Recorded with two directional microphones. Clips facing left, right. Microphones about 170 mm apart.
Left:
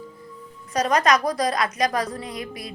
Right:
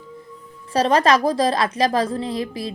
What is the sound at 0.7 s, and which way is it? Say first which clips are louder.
A woman's voice: right 3 dB; 30° right (ahead or behind).